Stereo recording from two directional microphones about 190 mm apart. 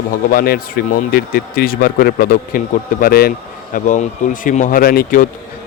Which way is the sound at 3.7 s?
40° left (ahead or behind).